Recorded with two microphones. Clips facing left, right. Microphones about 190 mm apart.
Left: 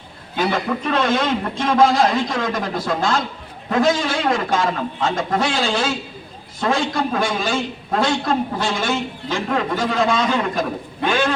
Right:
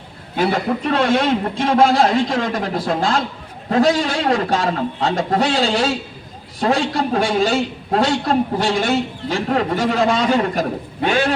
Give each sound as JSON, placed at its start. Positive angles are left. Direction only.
{"t": 0.9, "sound": "a man's voice", "side_deg": -30}